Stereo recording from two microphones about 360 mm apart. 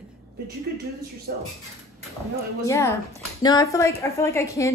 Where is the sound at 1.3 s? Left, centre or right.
Right.